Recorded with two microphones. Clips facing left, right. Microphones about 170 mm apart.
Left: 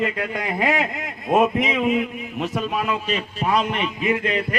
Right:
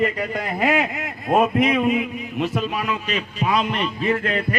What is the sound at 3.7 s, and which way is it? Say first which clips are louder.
Speech: right 1 dB; 10° left (ahead or behind).